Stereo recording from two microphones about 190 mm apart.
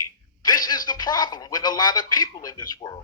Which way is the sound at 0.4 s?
20° left (ahead or behind).